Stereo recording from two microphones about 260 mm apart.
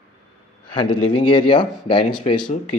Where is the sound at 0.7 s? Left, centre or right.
Centre.